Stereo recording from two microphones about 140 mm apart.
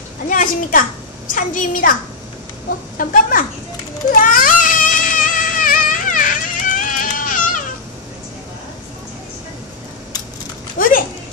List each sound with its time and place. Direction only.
0.3 s a child's voice: 70° left (ahead or behind)
3.0 s a woman's voice: 75° left (ahead or behind)
4.1 s baby cry: 75° left (ahead or behind)
10.8 s a sound: 85° left